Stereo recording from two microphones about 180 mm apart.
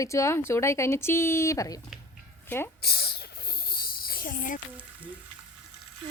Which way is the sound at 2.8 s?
60° left (ahead or behind).